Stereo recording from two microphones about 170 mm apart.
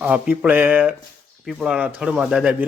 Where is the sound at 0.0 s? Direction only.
10° right (ahead or behind).